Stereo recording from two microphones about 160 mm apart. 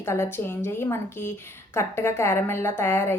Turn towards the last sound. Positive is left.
turn(degrees=15)  # may be behind; listen again after turning